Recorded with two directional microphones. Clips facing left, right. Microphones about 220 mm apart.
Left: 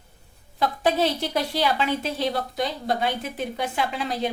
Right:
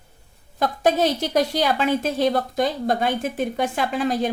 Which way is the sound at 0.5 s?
45° right (ahead or behind).